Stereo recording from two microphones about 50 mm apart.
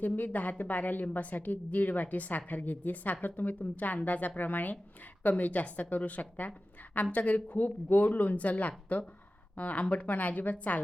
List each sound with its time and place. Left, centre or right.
0.0 s a woman's voice: left